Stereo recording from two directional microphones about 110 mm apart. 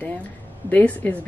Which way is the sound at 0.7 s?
15° left (ahead or behind).